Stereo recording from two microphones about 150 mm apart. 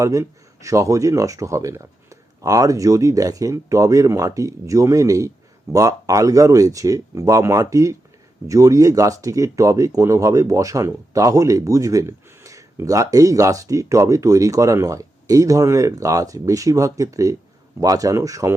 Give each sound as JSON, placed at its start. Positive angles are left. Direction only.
{"t": 0.0, "sound": "speech", "side_deg": -20}